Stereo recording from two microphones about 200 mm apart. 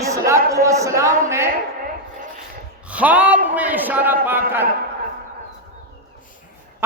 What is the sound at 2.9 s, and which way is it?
A man's voice, 5° right (ahead or behind).